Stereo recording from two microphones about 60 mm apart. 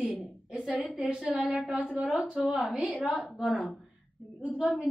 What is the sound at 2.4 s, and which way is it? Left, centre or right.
Speech, centre.